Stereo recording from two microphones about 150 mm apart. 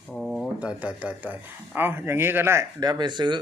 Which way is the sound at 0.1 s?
Centre (ahead or behind).